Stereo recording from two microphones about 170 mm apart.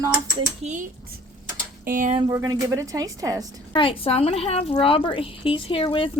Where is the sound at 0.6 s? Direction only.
45° right (ahead or behind).